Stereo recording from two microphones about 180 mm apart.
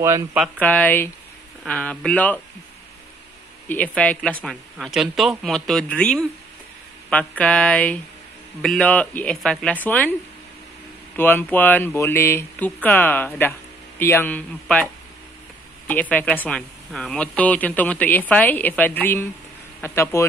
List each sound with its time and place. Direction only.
0.0 s speech: 15° right (ahead or behind)
0.6 s speech: 10° left (ahead or behind)
3.6 s a man's voice: 10° left (ahead or behind)
7.1 s speech: 5° left (ahead or behind)
11.1 s speech: 10° left (ahead or behind)
15.9 s speech: 10° left (ahead or behind)